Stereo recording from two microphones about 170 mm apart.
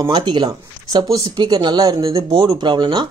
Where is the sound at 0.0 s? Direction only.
25° right (ahead or behind).